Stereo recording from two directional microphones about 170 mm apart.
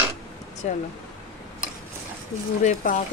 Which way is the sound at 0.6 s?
45° left (ahead or behind).